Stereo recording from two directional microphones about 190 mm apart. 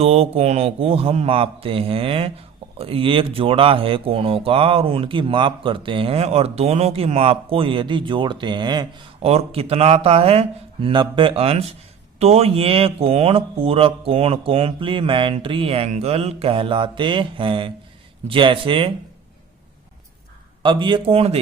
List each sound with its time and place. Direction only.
0.0 s mantra: 30° right (ahead or behind)
1.6 s speech: 30° right (ahead or behind)
20.6 s speech: 25° right (ahead or behind)